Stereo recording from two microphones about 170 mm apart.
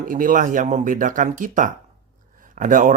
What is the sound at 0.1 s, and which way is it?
Speech, 55° right (ahead or behind).